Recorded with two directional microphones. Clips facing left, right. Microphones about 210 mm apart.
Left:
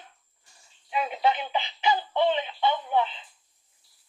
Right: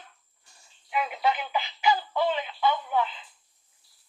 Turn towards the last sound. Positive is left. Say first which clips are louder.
# left 2 dB
turn(degrees=25)  # may be behind; listen again after turning